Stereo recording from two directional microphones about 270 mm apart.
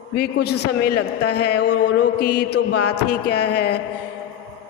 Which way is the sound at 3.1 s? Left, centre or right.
Left.